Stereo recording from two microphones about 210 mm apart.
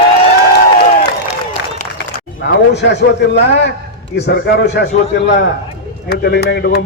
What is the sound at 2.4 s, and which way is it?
A man's voice, 55° left (ahead or behind).